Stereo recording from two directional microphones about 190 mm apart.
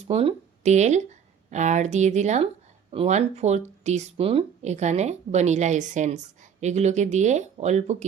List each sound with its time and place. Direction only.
0.1 s speech: 30° right (ahead or behind)